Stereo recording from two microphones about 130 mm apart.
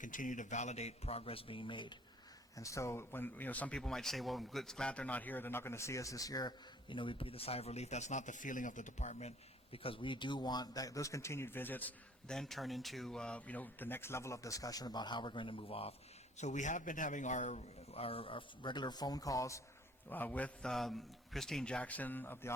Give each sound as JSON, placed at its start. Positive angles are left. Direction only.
{"t": 0.0, "sound": "a man's voice", "side_deg": 85}
{"t": 2.6, "sound": "speech", "side_deg": 25}
{"t": 9.7, "sound": "speech", "side_deg": 45}
{"t": 12.4, "sound": "speech", "side_deg": 0}
{"t": 16.4, "sound": "a man's voice", "side_deg": 70}
{"t": 20.1, "sound": "a man's voice", "side_deg": 15}